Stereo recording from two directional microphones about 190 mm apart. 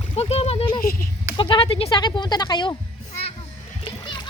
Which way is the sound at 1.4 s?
25° left (ahead or behind).